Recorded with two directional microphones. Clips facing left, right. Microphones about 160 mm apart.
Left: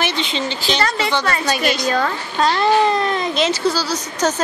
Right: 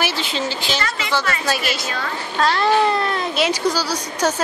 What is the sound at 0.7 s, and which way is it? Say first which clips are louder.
Speech: left 6 dB; 35° left (ahead or behind).